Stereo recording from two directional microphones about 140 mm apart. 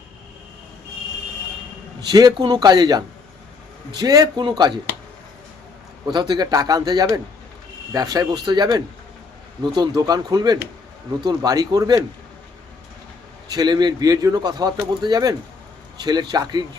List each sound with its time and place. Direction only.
2.0 s a man's voice: 30° right (ahead or behind)
4.0 s speech: 30° right (ahead or behind)
6.1 s a man's voice: 30° right (ahead or behind)
13.5 s a man's voice: 30° right (ahead or behind)